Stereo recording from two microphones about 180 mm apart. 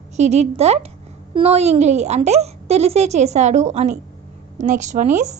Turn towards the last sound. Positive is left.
turn(degrees=-40)  # may be behind; listen again after turning